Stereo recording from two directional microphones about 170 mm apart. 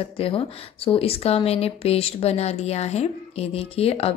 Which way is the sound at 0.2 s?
35° left (ahead or behind).